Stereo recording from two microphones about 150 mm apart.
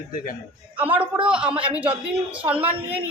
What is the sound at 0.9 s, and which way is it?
Speech, 35° right (ahead or behind).